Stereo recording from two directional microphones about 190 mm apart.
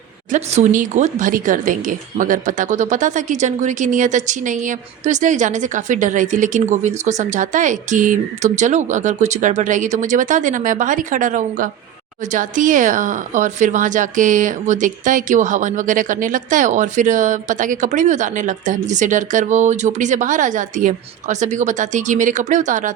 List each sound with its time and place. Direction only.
0.3 s speech: 40° right (ahead or behind)